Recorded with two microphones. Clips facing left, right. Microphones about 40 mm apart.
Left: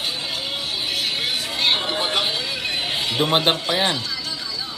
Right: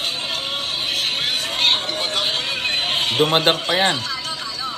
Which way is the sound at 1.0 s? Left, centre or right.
Right.